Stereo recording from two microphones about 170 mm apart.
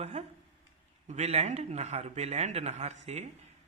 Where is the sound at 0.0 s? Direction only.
40° right (ahead or behind).